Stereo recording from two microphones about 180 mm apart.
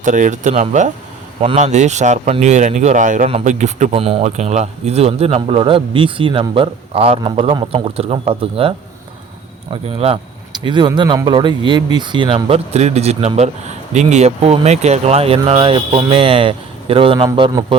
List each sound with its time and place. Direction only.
0.0 s speech: 45° right (ahead or behind)
9.8 s speech: 30° right (ahead or behind)